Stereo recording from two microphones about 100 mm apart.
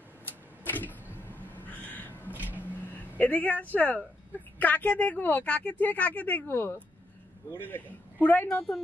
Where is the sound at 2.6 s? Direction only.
20° left (ahead or behind).